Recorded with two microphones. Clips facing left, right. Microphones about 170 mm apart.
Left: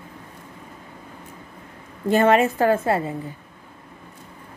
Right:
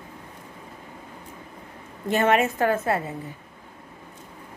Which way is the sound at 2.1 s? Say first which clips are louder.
Left 4 dB; 35° left (ahead or behind).